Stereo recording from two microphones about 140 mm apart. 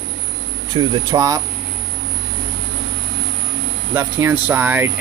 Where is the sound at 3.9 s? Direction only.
15° right (ahead or behind).